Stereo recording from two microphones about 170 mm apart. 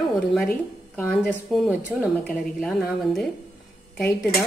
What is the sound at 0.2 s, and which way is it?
Speech, centre (ahead or behind).